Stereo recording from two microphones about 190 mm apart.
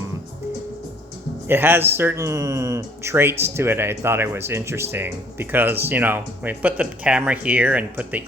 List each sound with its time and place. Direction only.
1.5 s speech: 10° right (ahead or behind)